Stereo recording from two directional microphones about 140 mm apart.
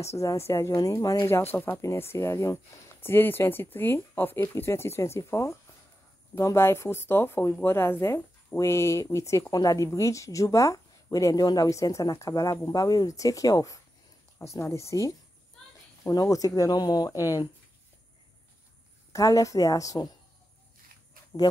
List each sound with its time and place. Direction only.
0.2 s speech: 20° left (ahead or behind)
19.1 s speech: 25° left (ahead or behind)